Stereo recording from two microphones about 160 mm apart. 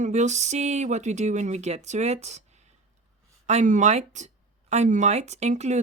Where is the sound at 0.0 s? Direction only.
45° right (ahead or behind).